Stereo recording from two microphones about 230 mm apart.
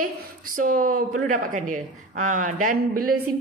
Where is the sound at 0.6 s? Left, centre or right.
Right.